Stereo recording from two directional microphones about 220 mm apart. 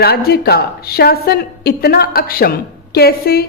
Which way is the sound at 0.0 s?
45° left (ahead or behind).